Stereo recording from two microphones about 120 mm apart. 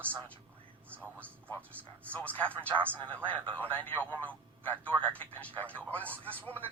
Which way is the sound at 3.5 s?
15° left (ahead or behind).